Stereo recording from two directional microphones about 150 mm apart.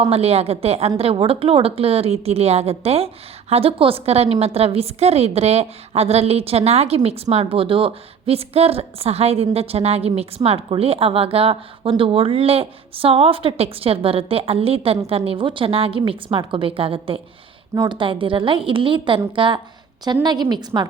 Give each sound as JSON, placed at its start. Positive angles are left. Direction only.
{"t": 0.0, "sound": "a woman's voice", "side_deg": -45}